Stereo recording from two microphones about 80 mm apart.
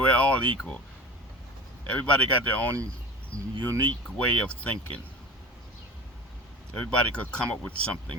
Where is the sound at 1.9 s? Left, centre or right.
Centre.